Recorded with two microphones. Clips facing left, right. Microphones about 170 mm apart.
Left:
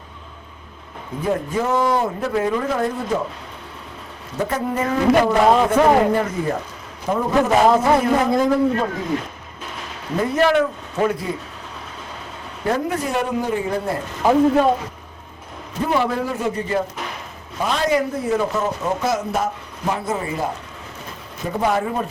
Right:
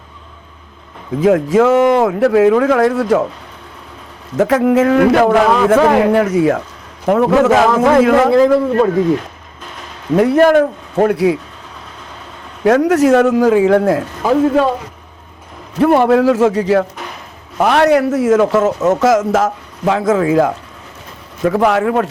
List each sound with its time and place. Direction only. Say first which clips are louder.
1.2 s speech: right 11 dB; 90° right
4.4 s a man's voice: right 11 dB; 90° right
10.2 s a man's voice: right 10 dB; 75° right (ahead or behind)
10.4 s a man's voice: right 7 dB; 50° right (ahead or behind); by 11.3 s 70° right (ahead or behind)
12.6 s a man's voice: right 12 dB; 85° right
15.9 s a man's voice: right 10 dB; 60° right (ahead or behind); by 16.8 s 90° right
17.6 s a man's voice: right 9 dB; 70° right (ahead or behind)